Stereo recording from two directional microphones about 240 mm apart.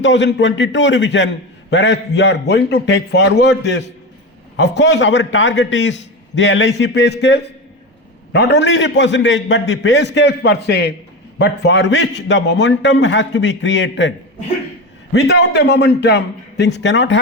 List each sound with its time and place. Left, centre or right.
0.0 s a man's voice: left
15.1 s a man's voice: left